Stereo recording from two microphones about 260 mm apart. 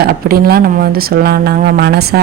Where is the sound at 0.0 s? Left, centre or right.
Right.